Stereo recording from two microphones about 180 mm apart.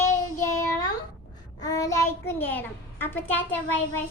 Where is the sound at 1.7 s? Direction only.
20° left (ahead or behind).